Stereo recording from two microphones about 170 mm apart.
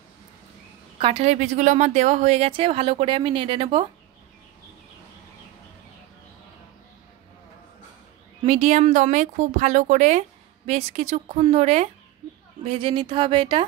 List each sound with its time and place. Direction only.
0.9 s a woman's voice: 35° right (ahead or behind)
8.5 s a woman's voice: 40° right (ahead or behind)